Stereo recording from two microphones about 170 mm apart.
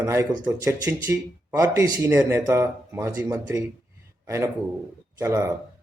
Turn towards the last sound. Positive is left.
turn(degrees=-15)  # may be behind; listen again after turning